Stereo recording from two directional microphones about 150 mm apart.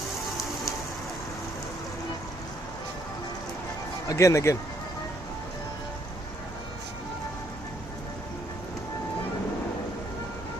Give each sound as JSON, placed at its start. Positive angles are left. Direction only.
{"t": 4.0, "sound": "speech", "side_deg": 20}